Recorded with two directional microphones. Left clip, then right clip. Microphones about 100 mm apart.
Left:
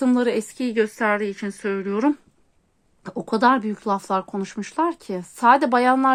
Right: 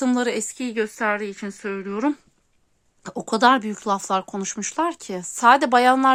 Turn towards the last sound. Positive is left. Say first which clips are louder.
# right 2 dB
turn(degrees=-30)  # may be behind; listen again after turning